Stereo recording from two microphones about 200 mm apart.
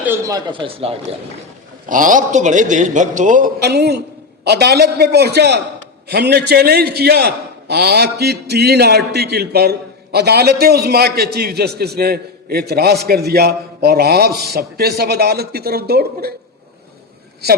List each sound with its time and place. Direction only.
0.0 s speech: 15° right (ahead or behind)
1.9 s a man's voice: 40° right (ahead or behind)